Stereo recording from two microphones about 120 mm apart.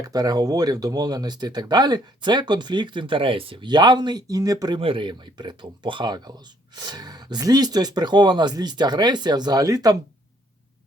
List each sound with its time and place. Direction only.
0.0 s speech: 30° right (ahead or behind)
4.8 s speech: 45° right (ahead or behind); by 10.0 s 30° right (ahead or behind)